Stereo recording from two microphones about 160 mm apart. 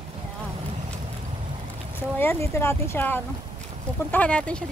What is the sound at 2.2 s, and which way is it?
Speech, 15° left (ahead or behind).